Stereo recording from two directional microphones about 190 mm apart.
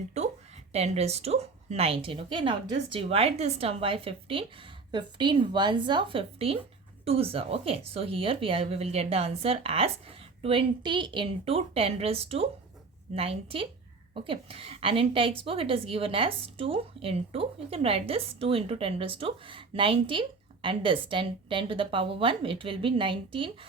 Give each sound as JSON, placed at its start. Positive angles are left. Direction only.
{"t": 0.7, "sound": "a woman's voice", "side_deg": -35}